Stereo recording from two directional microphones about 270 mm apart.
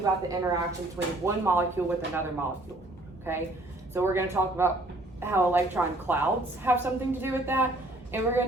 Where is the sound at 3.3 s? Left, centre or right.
Centre.